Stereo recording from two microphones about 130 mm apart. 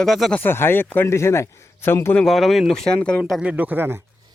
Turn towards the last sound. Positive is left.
turn(degrees=-20)  # may be behind; listen again after turning